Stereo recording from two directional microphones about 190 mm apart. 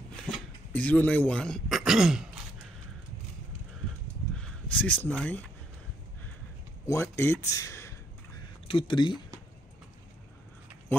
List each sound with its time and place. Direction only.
0.7 s speech: 10° left (ahead or behind)
4.4 s a sound: 5° left (ahead or behind)
6.9 s speech: 15° left (ahead or behind)
8.6 s speech: 25° left (ahead or behind)